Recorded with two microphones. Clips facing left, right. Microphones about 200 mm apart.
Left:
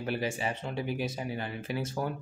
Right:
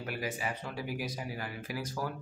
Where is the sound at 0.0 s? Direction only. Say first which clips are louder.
Left 4 dB; 25° left (ahead or behind).